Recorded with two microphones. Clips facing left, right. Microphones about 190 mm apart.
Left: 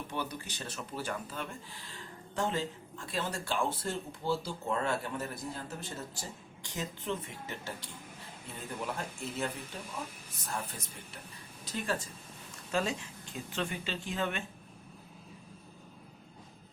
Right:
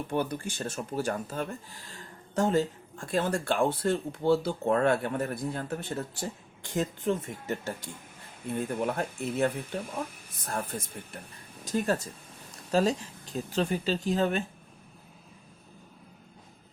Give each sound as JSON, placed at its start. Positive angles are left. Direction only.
{"t": 0.1, "sound": "speech", "side_deg": -50}